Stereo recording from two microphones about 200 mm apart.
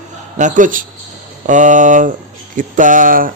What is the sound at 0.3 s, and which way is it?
A man's voice, 40° right (ahead or behind).